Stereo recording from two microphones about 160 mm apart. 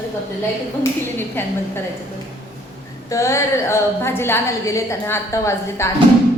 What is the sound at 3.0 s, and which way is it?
A woman's voice, 20° left (ahead or behind).